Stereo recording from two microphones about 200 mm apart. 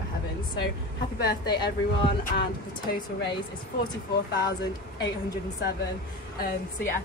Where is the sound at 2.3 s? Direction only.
45° left (ahead or behind).